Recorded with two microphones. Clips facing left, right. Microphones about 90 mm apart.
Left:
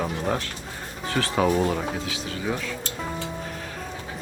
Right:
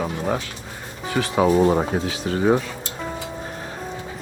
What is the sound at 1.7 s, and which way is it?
Speech, 40° right (ahead or behind).